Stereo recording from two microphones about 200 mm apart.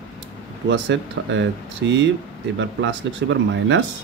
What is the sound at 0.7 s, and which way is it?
Speech, 65° right (ahead or behind).